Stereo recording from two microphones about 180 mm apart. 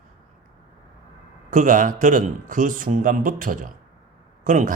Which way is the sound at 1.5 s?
45° right (ahead or behind).